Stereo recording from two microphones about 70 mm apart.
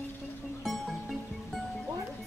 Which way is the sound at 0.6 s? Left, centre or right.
Centre.